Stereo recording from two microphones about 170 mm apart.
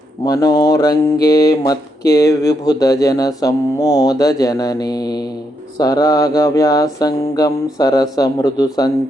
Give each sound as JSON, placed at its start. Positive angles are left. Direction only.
{"t": 0.3, "sound": "mantra", "side_deg": 20}